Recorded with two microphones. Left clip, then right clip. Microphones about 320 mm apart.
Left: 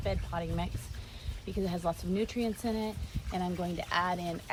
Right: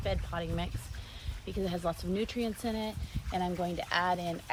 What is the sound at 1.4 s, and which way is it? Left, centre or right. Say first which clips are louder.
Speech: even; right.